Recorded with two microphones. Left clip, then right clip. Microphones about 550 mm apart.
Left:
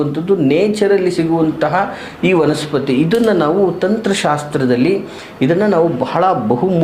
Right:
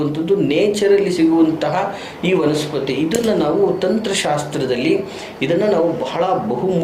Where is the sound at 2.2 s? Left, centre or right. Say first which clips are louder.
Left 3 dB; left.